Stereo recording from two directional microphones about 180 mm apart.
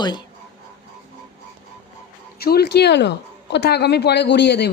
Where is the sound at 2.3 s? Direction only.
60° left (ahead or behind).